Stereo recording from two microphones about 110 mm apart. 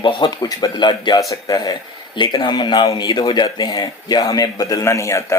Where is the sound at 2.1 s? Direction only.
45° left (ahead or behind).